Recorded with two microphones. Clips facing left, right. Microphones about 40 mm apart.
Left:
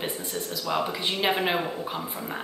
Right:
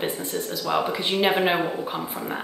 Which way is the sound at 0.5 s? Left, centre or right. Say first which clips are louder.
Right 3 dB; centre.